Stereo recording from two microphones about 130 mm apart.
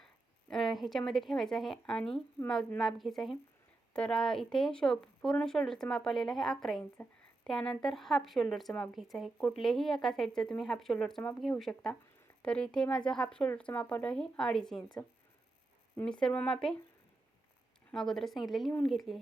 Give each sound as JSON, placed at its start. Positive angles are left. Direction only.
{"t": 0.5, "sound": "speech", "side_deg": 0}
{"t": 15.0, "sound": "speech", "side_deg": 30}
{"t": 16.0, "sound": "speech", "side_deg": 5}
{"t": 17.9, "sound": "speech", "side_deg": 5}